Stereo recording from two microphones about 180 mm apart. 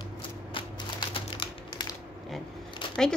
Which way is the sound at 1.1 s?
25° left (ahead or behind).